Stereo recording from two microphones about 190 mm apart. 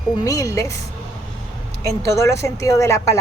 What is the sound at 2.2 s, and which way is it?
A woman's voice, 15° left (ahead or behind).